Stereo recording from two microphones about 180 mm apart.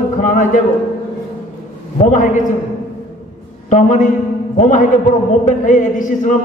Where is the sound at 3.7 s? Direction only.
45° left (ahead or behind).